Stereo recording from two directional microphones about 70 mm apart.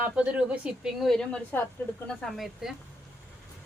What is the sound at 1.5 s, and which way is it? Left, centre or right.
Speech, left.